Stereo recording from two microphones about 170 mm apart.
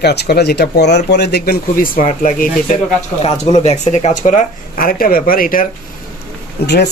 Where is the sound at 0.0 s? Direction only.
75° left (ahead or behind).